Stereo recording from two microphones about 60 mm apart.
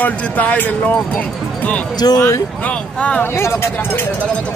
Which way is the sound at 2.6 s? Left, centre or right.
Left.